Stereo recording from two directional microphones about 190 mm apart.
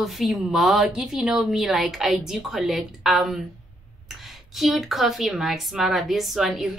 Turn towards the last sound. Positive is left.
turn(degrees=0)  # may be behind; listen again after turning